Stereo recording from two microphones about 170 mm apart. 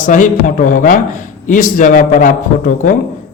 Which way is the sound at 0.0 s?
50° left (ahead or behind).